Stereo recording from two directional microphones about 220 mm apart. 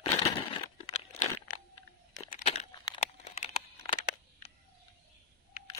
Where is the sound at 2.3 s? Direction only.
25° left (ahead or behind).